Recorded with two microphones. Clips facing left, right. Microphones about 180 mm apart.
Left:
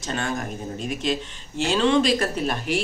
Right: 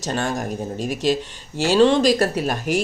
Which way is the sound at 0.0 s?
40° right (ahead or behind).